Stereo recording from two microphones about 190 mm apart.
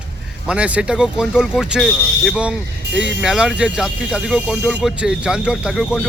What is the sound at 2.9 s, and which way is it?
Speech, 65° right (ahead or behind).